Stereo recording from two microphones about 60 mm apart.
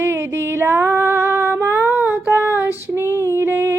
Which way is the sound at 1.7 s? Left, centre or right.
Right.